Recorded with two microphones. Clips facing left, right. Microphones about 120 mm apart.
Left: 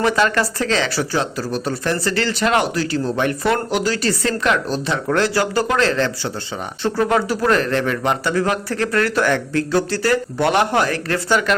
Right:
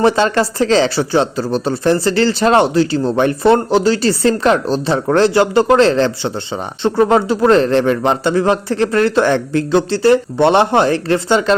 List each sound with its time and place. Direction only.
0.0 s a man's voice: 30° right (ahead or behind)